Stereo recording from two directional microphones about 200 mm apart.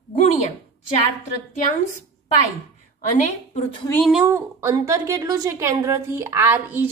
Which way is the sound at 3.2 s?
35° left (ahead or behind).